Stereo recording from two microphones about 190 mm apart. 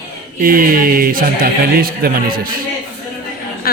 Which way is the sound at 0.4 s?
50° right (ahead or behind).